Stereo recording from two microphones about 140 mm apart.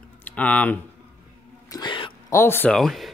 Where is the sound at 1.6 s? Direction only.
30° left (ahead or behind).